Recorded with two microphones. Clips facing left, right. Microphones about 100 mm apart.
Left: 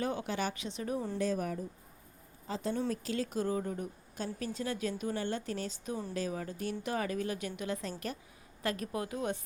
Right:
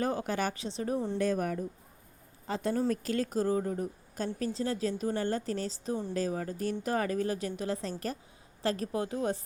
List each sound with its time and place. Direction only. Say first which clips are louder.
0.0 s a woman's voice: right 3 dB; 40° right (ahead or behind)
0.5 s a woman's voice: right 4 dB; 35° right (ahead or behind)
1.2 s speech: right 3 dB; 55° right (ahead or behind)
2.9 s a woman's voice: right 4 dB; 50° right (ahead or behind); by 9.4 s 30° right (ahead or behind)